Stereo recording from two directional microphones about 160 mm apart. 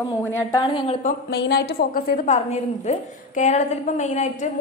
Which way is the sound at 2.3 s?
45° left (ahead or behind).